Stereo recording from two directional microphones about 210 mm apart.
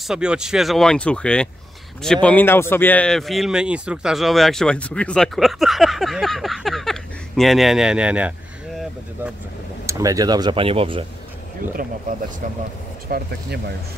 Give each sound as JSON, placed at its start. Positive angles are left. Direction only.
{"t": 0.0, "sound": "speech", "side_deg": -5}
{"t": 9.8, "sound": "speech", "side_deg": -15}
{"t": 11.6, "sound": "speech", "side_deg": -40}